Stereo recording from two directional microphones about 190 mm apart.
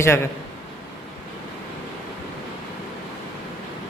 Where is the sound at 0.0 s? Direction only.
15° left (ahead or behind).